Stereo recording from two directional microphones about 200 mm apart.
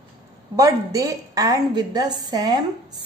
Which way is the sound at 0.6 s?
15° right (ahead or behind).